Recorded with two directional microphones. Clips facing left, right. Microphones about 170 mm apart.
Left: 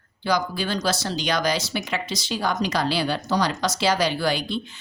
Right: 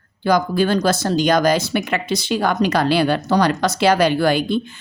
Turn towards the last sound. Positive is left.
turn(degrees=-50)  # may be behind; listen again after turning